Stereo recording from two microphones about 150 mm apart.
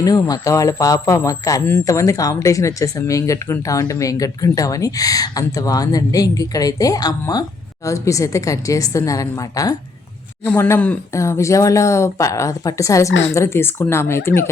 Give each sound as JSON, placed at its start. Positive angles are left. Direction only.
{"t": 0.0, "sound": "speech", "side_deg": 25}